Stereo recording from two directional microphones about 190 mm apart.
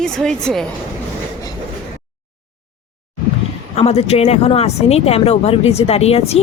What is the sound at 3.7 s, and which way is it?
Speech, 35° left (ahead or behind).